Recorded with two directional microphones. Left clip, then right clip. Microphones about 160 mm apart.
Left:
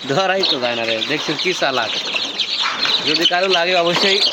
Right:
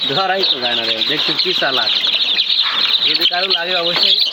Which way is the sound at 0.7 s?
30° left (ahead or behind).